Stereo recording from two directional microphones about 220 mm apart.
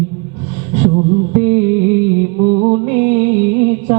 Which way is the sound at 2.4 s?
35° right (ahead or behind).